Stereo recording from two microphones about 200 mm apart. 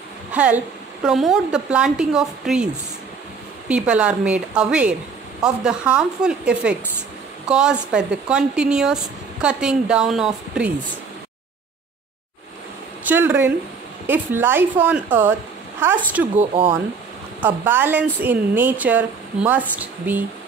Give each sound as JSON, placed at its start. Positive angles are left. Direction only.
{"t": 0.3, "sound": "speech", "side_deg": -5}
{"t": 13.0, "sound": "speech", "side_deg": -10}
{"t": 16.3, "sound": "speech", "side_deg": -25}
{"t": 17.4, "sound": "speech", "side_deg": -10}